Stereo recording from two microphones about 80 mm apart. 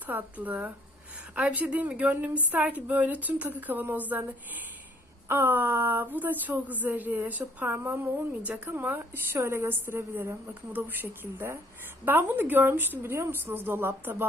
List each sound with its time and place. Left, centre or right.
0.0 s speech: right